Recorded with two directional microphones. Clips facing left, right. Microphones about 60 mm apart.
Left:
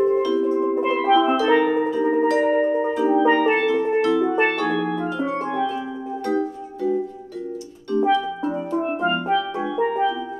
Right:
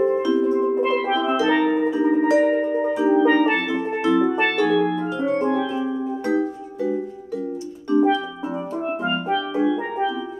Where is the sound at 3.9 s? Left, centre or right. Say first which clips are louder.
Right 3 dB; centre.